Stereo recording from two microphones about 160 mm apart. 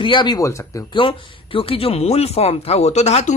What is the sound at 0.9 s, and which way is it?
A man's voice, 35° left (ahead or behind).